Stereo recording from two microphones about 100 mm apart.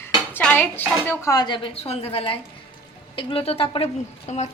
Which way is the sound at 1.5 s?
55° left (ahead or behind).